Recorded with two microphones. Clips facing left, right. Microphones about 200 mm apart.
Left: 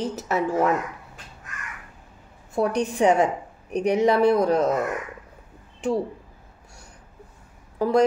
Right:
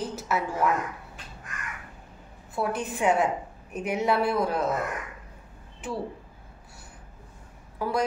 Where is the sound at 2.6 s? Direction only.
40° left (ahead or behind).